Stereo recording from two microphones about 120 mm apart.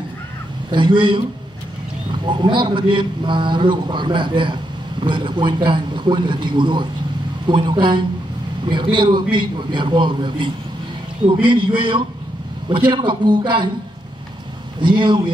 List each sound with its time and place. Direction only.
0.7 s a man's voice: 40° right (ahead or behind)
2.2 s a man's voice: 40° right (ahead or behind)
14.8 s a man's voice: 40° right (ahead or behind)